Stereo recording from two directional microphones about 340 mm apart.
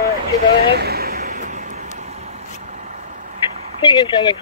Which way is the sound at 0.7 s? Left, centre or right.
Right.